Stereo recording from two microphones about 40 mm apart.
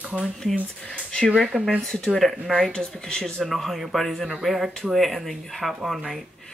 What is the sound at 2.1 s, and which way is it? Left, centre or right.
Speech, centre.